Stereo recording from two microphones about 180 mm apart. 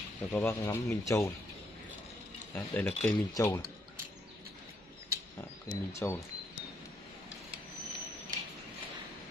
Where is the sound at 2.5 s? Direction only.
10° left (ahead or behind).